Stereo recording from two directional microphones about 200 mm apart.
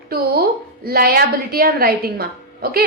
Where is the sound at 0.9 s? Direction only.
50° right (ahead or behind).